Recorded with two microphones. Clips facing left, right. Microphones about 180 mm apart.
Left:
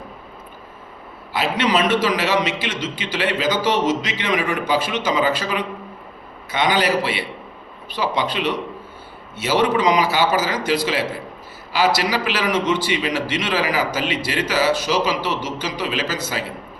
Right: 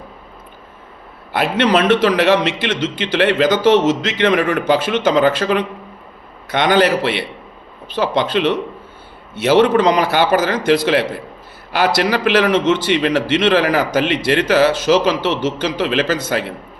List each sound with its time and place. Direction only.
1.3 s a man's voice: 60° right (ahead or behind)